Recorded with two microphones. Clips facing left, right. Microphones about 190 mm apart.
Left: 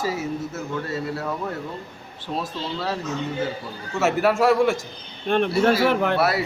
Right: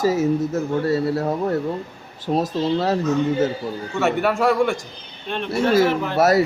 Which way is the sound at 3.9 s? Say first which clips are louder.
Left 1 dB; centre (ahead or behind).